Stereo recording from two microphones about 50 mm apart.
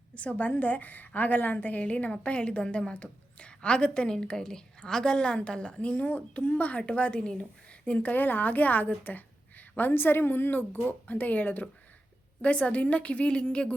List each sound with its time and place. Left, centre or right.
0.1 s a woman's voice: left